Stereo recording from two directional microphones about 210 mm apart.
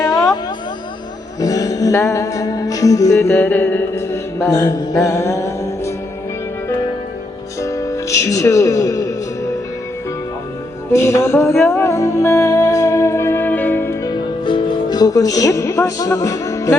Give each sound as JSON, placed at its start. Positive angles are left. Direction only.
{"t": 0.0, "sound": "music", "side_deg": 20}
{"t": 1.4, "sound": "music", "side_deg": 15}
{"t": 8.1, "sound": "a man's voice", "side_deg": 15}
{"t": 10.9, "sound": "music", "side_deg": 10}